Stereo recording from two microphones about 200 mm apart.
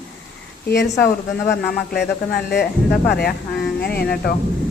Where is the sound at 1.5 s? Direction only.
55° left (ahead or behind).